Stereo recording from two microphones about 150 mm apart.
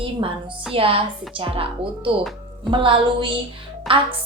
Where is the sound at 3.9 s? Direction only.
Centre (ahead or behind).